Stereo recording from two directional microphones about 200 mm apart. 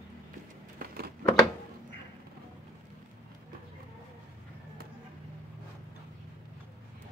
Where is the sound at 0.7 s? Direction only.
50° right (ahead or behind).